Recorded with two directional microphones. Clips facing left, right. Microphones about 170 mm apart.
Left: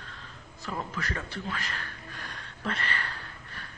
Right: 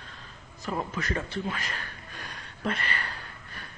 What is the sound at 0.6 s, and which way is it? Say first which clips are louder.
Speech: right 3 dB; 20° right (ahead or behind).